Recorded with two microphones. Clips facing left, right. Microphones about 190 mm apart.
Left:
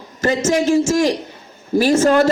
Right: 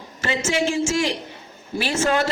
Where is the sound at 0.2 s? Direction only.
40° left (ahead or behind).